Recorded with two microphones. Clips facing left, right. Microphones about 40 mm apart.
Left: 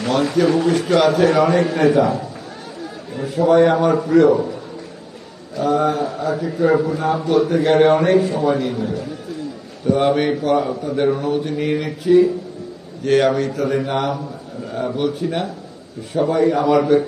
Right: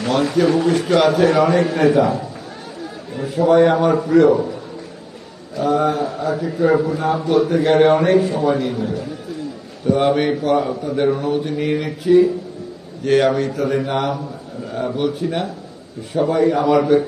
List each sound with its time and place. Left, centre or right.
0.0 s a man's voice: centre